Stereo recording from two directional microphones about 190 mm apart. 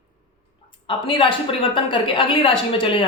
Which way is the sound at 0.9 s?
25° left (ahead or behind).